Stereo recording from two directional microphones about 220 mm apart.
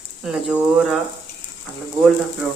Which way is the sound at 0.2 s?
Centre (ahead or behind).